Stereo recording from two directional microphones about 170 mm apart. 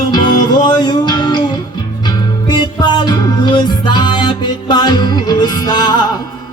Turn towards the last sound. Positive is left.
turn(degrees=25)  # may be behind; listen again after turning